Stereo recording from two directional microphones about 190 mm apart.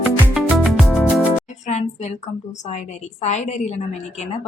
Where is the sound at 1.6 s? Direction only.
40° left (ahead or behind).